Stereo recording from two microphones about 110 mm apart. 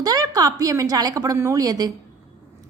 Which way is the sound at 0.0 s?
35° right (ahead or behind).